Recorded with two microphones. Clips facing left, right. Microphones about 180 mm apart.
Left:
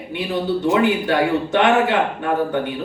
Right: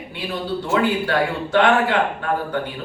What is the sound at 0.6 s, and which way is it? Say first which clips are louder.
A man's voice: left 2 dB; 20° left (ahead or behind).